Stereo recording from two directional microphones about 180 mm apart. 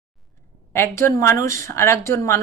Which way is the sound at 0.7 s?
15° left (ahead or behind).